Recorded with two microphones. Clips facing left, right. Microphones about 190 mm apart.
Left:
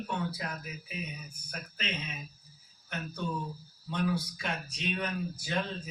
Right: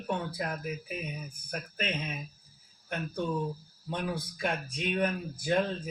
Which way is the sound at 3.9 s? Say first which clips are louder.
Left 2 dB; 50° right (ahead or behind).